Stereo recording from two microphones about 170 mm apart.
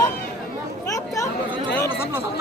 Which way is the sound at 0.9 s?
20° left (ahead or behind).